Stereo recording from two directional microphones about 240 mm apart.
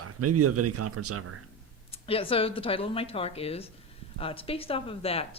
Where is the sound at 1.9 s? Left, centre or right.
Left.